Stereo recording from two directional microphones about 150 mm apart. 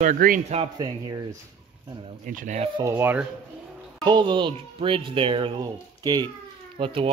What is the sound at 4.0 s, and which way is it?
Speech, 30° right (ahead or behind).